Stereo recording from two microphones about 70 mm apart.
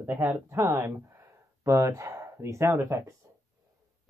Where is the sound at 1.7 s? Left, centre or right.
Right.